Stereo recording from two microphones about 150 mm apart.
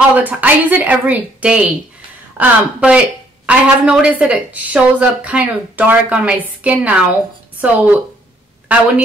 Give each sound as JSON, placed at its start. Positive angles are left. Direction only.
{"t": 0.1, "sound": "speech", "side_deg": -10}